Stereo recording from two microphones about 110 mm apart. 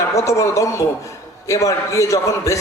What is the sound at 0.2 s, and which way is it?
Speech, 30° left (ahead or behind).